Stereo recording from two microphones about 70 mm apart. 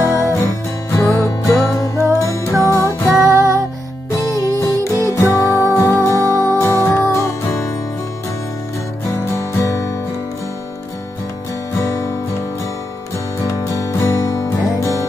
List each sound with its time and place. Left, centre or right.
0.0 s music: left
2.8 s music: right
4.2 s music: left
9.1 s music: left
11.8 s guitar: left
13.5 s music: left